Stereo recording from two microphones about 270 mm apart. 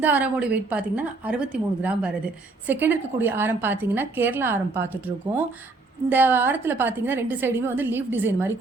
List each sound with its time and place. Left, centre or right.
0.0 s a woman's voice: centre
6.1 s a woman's voice: centre